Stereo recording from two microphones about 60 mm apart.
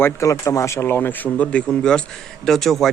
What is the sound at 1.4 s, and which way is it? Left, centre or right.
Speech, centre.